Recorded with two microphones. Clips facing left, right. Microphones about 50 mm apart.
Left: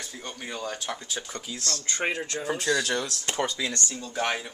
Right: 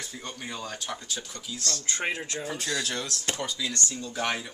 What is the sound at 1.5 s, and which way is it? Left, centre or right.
Speech, centre.